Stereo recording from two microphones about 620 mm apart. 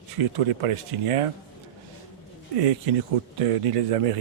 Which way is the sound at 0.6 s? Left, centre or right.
Right.